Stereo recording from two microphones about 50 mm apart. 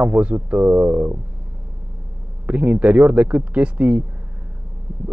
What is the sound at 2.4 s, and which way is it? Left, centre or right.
Speech, right.